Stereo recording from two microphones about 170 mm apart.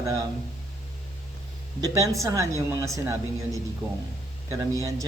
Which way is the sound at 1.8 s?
20° right (ahead or behind).